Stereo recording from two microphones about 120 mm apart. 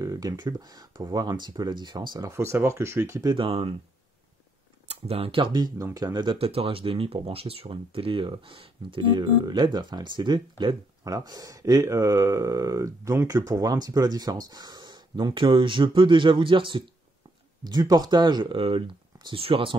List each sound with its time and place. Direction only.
0.0 s speech: 30° right (ahead or behind)
3.3 s speech: 50° right (ahead or behind)
4.8 s speech: 55° right (ahead or behind); by 6.3 s 35° right (ahead or behind)
6.3 s speech: 50° right (ahead or behind)
17.6 s speech: 35° right (ahead or behind)